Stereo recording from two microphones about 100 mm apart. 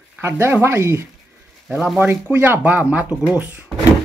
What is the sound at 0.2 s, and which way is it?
Speech, 25° right (ahead or behind).